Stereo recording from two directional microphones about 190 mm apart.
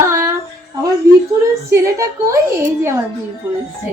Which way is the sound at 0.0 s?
15° right (ahead or behind).